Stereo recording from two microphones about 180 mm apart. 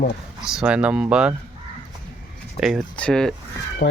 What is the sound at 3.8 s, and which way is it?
Speech, 55° left (ahead or behind).